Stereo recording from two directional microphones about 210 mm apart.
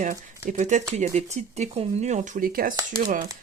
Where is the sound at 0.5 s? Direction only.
35° right (ahead or behind).